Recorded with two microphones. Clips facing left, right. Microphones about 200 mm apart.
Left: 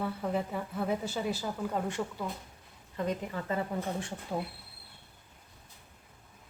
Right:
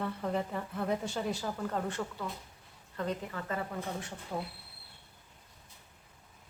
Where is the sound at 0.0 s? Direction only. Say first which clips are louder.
Left 1 dB; 5° left (ahead or behind); by 4.1 s 25° left (ahead or behind).